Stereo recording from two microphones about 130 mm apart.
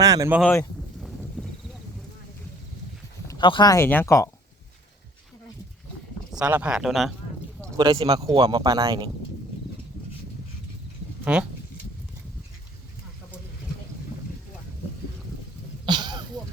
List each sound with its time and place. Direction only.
0.0 s a sound: 25° right (ahead or behind)
1.0 s a sound: centre (ahead or behind)
3.3 s speech: 35° left (ahead or behind)
3.8 s speech: 20° left (ahead or behind)
6.3 s speech: 10° right (ahead or behind)
7.8 s speech: 40° right (ahead or behind)
8.4 s speech: 30° right (ahead or behind)
11.3 s speech: 10° right (ahead or behind)
15.9 s a sound: 35° right (ahead or behind)